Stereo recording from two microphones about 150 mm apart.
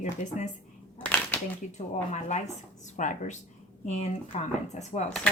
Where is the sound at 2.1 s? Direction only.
50° left (ahead or behind).